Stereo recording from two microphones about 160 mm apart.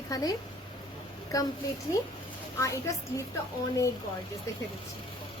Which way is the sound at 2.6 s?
20° left (ahead or behind).